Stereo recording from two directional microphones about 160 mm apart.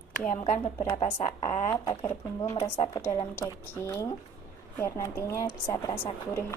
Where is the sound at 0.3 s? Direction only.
45° left (ahead or behind).